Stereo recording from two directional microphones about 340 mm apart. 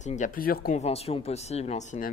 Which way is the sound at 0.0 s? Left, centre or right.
Left.